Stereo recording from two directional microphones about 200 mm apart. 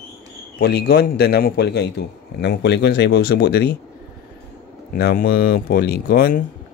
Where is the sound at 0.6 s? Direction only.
55° left (ahead or behind).